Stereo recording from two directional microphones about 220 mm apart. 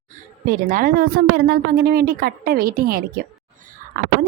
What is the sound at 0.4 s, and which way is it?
A woman's voice, 40° right (ahead or behind).